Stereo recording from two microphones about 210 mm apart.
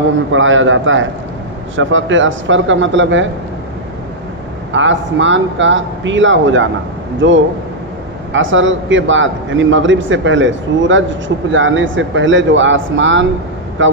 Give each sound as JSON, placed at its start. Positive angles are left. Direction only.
{"t": 0.3, "sound": "a man's voice", "side_deg": -65}
{"t": 4.7, "sound": "a man's voice", "side_deg": -60}